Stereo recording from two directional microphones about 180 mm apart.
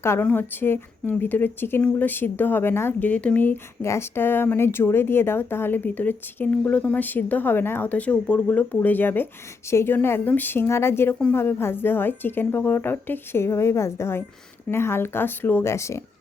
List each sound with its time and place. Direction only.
0.0 s speech: 15° left (ahead or behind)